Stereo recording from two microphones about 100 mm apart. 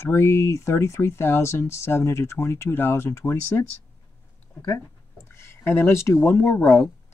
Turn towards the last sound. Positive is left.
turn(degrees=30)  # may be behind; listen again after turning